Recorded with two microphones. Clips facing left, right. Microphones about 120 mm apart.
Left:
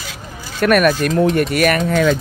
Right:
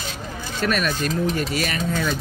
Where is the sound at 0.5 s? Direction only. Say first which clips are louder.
Left 10 dB; 60° left (ahead or behind); by 2.1 s 80° left.